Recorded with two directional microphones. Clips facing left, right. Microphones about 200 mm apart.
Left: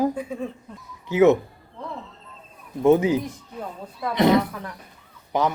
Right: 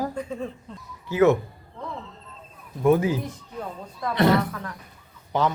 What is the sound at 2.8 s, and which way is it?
Speech, 20° left (ahead or behind).